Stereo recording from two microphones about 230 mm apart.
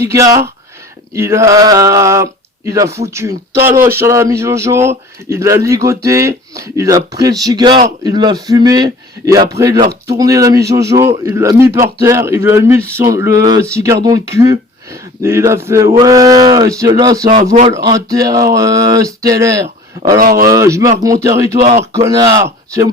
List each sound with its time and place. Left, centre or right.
0.0 s speech: centre
17.5 s speech: right
17.8 s speech: centre
19.6 s a sound: right
20.5 s speech: centre